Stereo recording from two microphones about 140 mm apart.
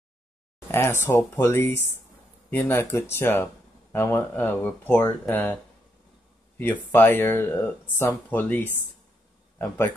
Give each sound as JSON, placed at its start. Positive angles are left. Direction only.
{"t": 0.7, "sound": "speech", "side_deg": 15}
{"t": 6.6, "sound": "speech", "side_deg": 15}